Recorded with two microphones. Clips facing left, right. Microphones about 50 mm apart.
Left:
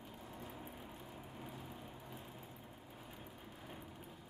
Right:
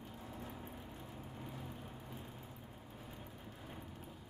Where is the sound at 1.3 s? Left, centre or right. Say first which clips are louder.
Right 2 dB; centre.